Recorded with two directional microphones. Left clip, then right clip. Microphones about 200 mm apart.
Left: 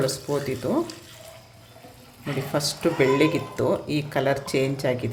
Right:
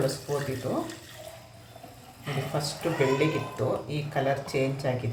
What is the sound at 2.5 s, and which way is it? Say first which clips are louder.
Speech: left 6 dB; 50° left (ahead or behind).